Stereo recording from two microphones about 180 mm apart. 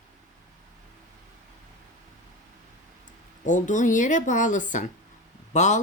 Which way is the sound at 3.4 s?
45° left (ahead or behind).